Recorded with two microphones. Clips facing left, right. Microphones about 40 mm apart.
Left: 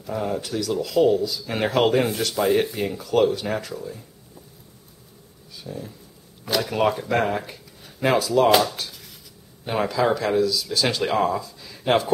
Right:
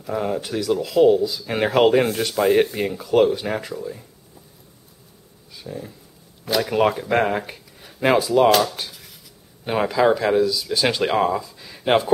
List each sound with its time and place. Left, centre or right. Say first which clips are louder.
0.0 s speech: right 2 dB; centre
5.6 s speech: right 1 dB; centre
8.5 s speech: right 1 dB; centre
9.7 s speech: right 3 dB; centre